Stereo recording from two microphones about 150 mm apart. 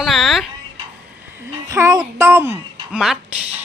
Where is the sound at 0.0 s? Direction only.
Centre (ahead or behind).